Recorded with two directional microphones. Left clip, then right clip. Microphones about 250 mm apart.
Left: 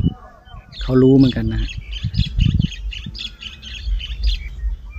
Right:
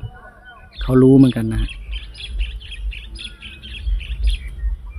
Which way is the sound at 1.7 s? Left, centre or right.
Left.